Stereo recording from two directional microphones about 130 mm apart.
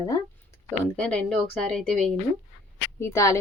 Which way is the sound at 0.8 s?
10° left (ahead or behind).